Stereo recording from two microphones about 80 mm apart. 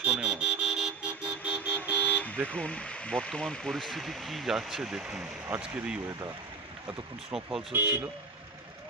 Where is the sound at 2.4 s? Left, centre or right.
Centre.